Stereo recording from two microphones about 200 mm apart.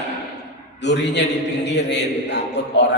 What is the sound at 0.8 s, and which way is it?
A woman's voice, 60° left (ahead or behind).